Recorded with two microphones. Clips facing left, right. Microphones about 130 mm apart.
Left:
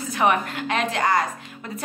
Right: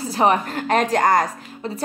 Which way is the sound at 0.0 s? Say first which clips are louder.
Right 3 dB; 35° right (ahead or behind).